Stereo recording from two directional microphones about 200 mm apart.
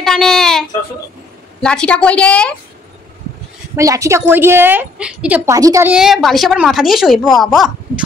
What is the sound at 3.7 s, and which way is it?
A woman's voice, 15° right (ahead or behind).